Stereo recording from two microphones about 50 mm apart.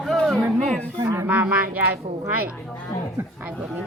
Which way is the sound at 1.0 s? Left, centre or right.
Right.